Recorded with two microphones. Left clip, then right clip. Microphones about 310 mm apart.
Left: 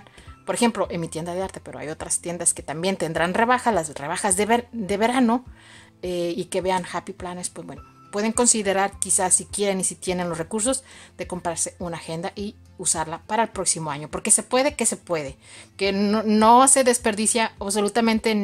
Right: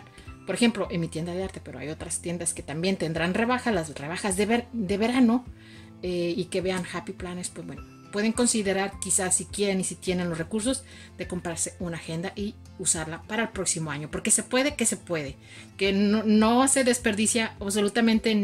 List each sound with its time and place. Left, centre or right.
0.5 s speech: centre